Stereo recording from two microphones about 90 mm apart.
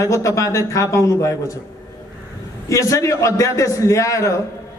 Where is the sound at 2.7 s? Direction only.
35° left (ahead or behind).